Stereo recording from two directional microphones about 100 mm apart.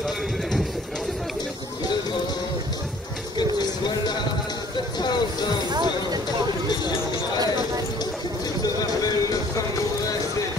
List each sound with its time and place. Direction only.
3.3 s music: 45° left (ahead or behind)
5.7 s a sound: 45° right (ahead or behind)
8.6 s music: 35° left (ahead or behind)